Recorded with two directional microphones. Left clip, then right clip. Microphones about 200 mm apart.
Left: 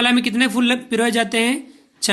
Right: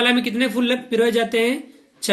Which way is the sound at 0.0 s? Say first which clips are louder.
Left 1 dB; 40° left (ahead or behind).